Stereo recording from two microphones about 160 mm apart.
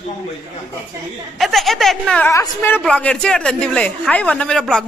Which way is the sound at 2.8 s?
5° left (ahead or behind).